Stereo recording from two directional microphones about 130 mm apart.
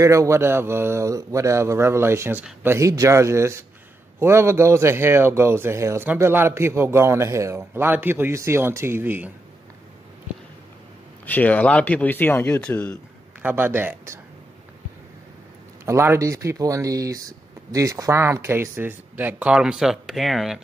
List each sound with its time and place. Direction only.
0.0 s a man's voice: 25° right (ahead or behind)
11.2 s speech: 10° left (ahead or behind)
13.4 s speech: 15° right (ahead or behind)
15.8 s a man's voice: 20° right (ahead or behind); by 20.6 s centre (ahead or behind)